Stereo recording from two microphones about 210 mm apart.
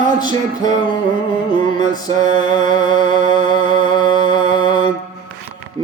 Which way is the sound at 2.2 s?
40° right (ahead or behind).